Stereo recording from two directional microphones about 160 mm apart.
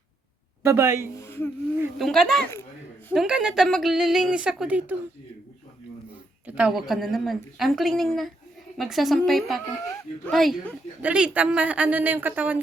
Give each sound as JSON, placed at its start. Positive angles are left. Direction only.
{"t": 0.6, "sound": "a woman's voice", "side_deg": -15}
{"t": 1.2, "sound": "a sound", "side_deg": 15}
{"t": 2.0, "sound": "a woman's voice", "side_deg": 0}
{"t": 6.5, "sound": "a woman's voice", "side_deg": -5}